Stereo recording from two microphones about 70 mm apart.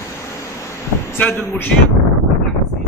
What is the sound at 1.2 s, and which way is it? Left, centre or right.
Speech, left.